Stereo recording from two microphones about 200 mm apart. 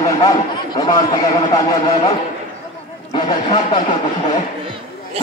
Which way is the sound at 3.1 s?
25° left (ahead or behind).